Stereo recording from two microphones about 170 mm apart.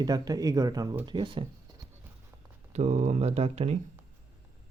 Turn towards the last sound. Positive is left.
turn(degrees=-35)  # may be behind; listen again after turning